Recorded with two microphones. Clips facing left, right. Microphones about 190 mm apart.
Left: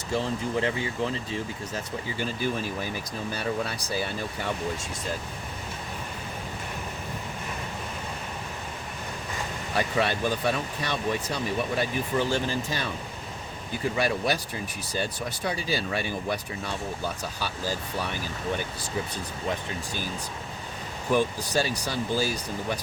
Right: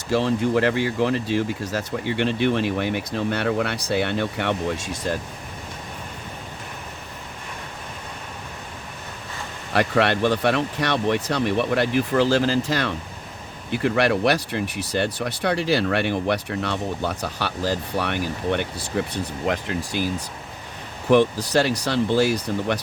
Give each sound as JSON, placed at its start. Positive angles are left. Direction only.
{"t": 0.1, "sound": "speech", "side_deg": -75}
{"t": 9.7, "sound": "speech", "side_deg": -70}
{"t": 21.1, "sound": "speech", "side_deg": -70}